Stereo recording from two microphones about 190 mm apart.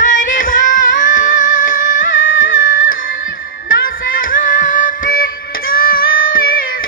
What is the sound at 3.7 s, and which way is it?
Music, 50° left (ahead or behind).